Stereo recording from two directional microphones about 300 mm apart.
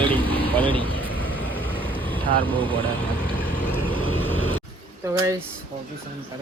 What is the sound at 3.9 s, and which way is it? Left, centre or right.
Vehicle, centre.